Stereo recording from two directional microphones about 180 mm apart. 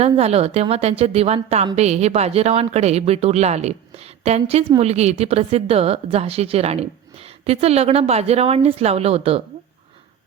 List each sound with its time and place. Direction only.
0.0 s a woman's voice: 35° right (ahead or behind)